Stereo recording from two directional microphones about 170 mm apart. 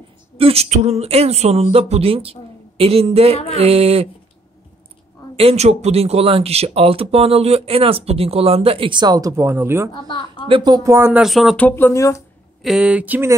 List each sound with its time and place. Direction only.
0.4 s speech: 35° right (ahead or behind)
5.3 s speech: 35° right (ahead or behind); by 9.8 s 15° right (ahead or behind)
10.0 s speech: 30° left (ahead or behind)
10.5 s speech: 25° right (ahead or behind)
11.2 s speech: centre (ahead or behind); by 12.2 s 15° left (ahead or behind)
12.6 s speech: 5° right (ahead or behind)